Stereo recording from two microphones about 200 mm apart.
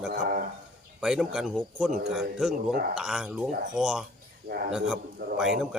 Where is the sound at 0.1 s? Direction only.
45° right (ahead or behind).